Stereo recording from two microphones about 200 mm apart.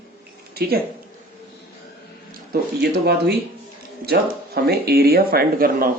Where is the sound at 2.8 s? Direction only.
55° right (ahead or behind).